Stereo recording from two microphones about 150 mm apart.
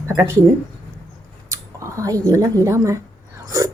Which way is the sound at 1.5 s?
20° right (ahead or behind).